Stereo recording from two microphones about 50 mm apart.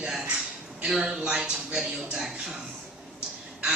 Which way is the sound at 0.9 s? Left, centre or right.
Centre.